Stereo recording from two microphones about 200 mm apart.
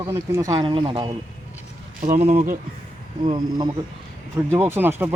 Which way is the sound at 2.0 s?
35° right (ahead or behind).